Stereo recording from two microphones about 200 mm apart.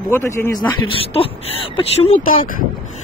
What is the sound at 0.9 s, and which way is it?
Speech, 30° left (ahead or behind).